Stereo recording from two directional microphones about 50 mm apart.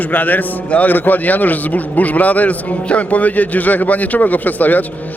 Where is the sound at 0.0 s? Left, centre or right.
Left.